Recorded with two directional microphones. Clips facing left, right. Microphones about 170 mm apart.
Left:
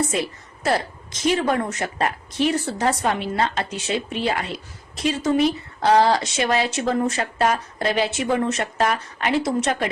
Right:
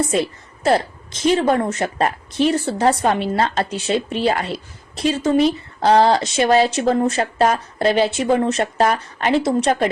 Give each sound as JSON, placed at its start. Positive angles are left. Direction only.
{"t": 0.1, "sound": "a woman's voice", "side_deg": -30}